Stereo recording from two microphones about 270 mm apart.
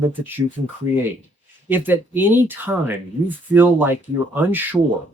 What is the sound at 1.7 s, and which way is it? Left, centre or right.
Speech, centre.